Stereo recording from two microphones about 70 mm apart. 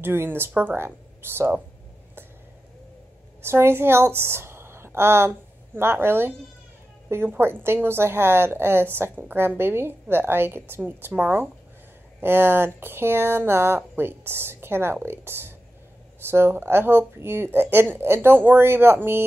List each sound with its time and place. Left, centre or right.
0.0 s a woman's voice: right
3.4 s a woman's voice: right